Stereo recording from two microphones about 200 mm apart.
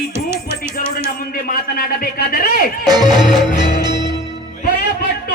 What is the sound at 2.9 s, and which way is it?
Music, 20° right (ahead or behind).